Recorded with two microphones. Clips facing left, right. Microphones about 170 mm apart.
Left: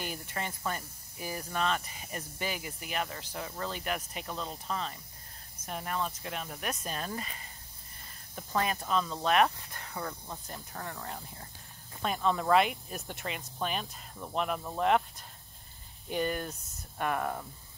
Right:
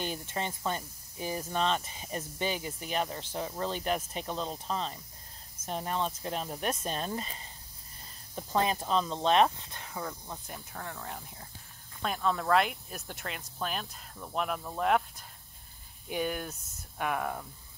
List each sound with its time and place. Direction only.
0.0 s speech: 25° right (ahead or behind)
10.2 s speech: centre (ahead or behind)